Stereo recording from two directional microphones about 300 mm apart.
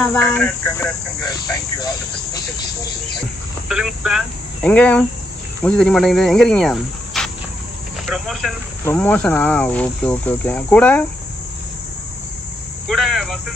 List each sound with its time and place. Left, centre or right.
0.1 s speech: centre
3.6 s speech: centre
12.8 s a sound: centre